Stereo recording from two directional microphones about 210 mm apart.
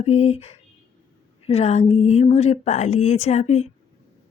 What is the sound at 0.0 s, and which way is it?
A woman's voice, 30° left (ahead or behind).